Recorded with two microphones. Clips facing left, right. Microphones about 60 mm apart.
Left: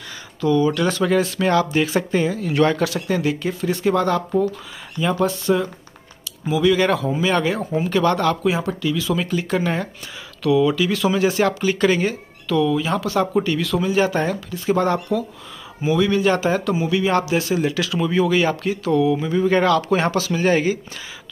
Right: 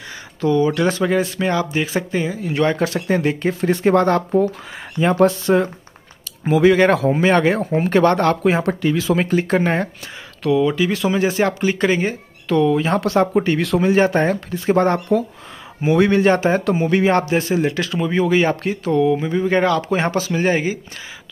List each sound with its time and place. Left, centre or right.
0.4 s speech: right
12.5 s speech: right
13.6 s speech: right
13.9 s speech: right